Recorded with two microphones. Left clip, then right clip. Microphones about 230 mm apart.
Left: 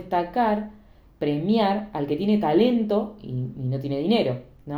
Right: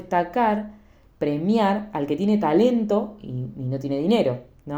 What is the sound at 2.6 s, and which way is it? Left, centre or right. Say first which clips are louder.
Speech: right 1 dB; right.